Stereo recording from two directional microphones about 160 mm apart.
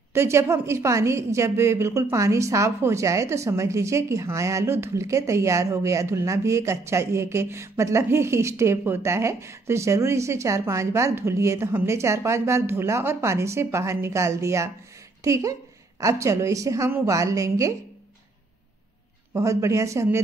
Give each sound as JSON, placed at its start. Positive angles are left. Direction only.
{"t": 0.1, "sound": "a woman's voice", "side_deg": -15}
{"t": 19.3, "sound": "a woman's voice", "side_deg": -20}